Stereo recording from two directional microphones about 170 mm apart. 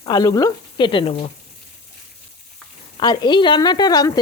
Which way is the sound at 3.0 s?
25° left (ahead or behind).